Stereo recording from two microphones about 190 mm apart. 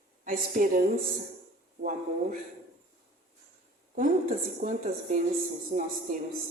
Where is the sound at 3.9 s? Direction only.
45° right (ahead or behind).